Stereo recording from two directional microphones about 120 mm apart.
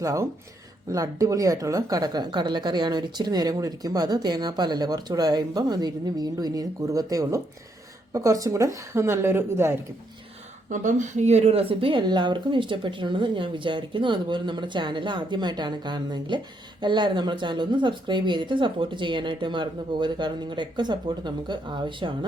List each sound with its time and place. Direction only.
0.0 s a woman's voice: 25° right (ahead or behind)
10.7 s speech: 90° right; by 22.1 s 40° right (ahead or behind)